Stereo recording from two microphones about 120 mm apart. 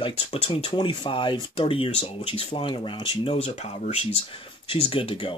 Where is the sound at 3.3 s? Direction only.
65° left (ahead or behind).